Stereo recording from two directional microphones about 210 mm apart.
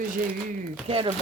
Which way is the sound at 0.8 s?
25° right (ahead or behind).